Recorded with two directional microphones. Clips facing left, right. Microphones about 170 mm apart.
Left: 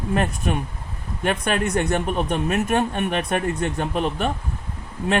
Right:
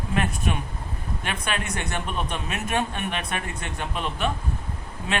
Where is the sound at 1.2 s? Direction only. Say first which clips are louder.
Left 8 dB; 45° left (ahead or behind).